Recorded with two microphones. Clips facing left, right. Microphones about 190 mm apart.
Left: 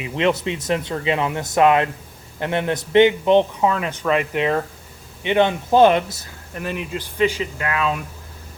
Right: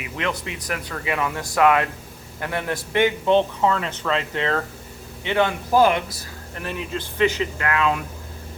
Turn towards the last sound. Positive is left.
turn(degrees=25)  # may be behind; listen again after turning